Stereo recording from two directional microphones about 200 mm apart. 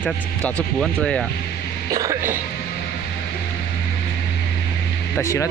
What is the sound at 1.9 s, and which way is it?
Speech, 15° right (ahead or behind).